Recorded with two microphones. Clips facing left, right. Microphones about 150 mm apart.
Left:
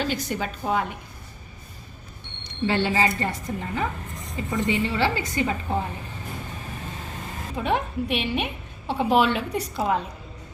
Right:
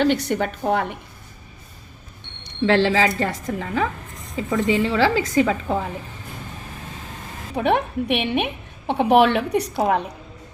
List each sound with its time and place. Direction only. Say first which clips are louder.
0.0 s a woman's voice: right 7 dB; 65° right (ahead or behind)
2.6 s a woman's voice: right 5 dB; 90° right
7.5 s a woman's voice: right 5 dB; 65° right (ahead or behind)